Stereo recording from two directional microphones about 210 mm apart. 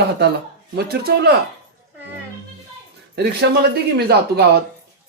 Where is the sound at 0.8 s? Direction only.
50° right (ahead or behind).